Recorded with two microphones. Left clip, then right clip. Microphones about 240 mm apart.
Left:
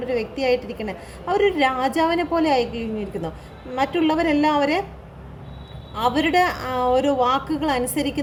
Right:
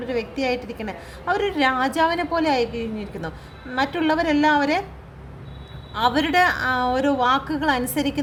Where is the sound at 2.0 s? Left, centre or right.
Right.